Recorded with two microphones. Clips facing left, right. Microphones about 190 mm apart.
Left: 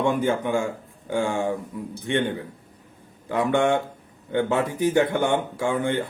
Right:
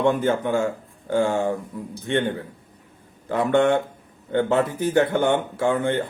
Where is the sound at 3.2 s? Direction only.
15° left (ahead or behind).